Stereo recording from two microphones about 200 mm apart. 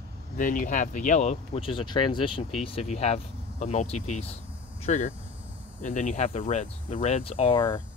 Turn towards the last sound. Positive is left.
turn(degrees=20)  # may be behind; listen again after turning